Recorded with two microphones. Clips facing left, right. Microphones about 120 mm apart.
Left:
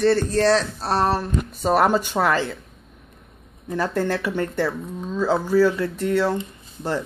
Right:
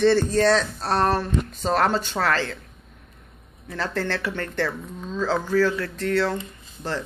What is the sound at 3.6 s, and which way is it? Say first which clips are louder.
Speech: left 4 dB; 15° left (ahead or behind).